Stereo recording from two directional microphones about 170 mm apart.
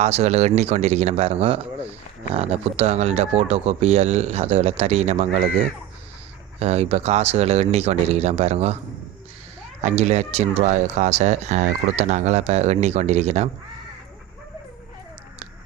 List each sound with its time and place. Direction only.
0.0 s speech: 40° right (ahead or behind)
6.6 s speech: 40° right (ahead or behind)
9.8 s speech: 40° right (ahead or behind)